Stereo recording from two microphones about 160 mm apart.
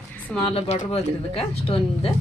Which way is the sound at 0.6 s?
40° left (ahead or behind).